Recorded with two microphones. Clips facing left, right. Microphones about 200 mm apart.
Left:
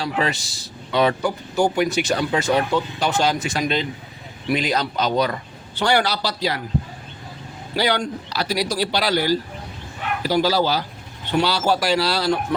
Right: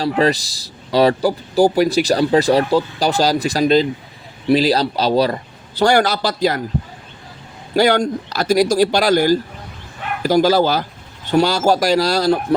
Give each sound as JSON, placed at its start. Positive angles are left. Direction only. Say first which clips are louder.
{"t": 0.0, "sound": "speech", "louder": "right 7 dB", "side_deg": -35}
{"t": 7.8, "sound": "speech", "louder": "right 7 dB", "side_deg": -45}